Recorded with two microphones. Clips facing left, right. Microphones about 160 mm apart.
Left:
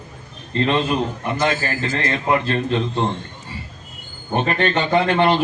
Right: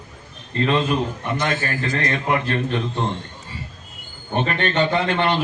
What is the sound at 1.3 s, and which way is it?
A man's voice, 25° left (ahead or behind).